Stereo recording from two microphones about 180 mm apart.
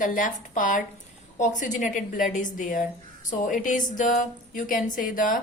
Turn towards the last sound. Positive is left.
turn(degrees=50)  # may be behind; listen again after turning